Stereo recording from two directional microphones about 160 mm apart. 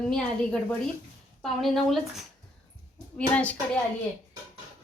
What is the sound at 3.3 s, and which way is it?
Speech, 10° left (ahead or behind).